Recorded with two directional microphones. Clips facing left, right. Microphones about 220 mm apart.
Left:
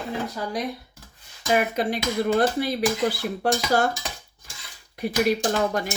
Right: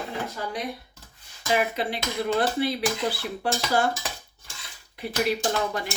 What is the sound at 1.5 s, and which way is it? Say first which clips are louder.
Speech: left 3 dB; 45° left (ahead or behind).